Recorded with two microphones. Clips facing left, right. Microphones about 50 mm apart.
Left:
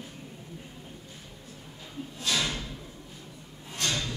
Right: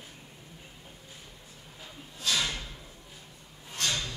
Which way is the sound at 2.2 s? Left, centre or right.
Centre.